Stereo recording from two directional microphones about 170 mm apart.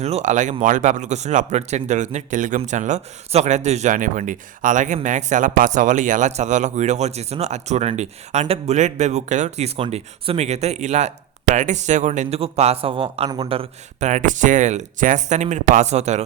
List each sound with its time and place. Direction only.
0.0 s speech: 40° right (ahead or behind)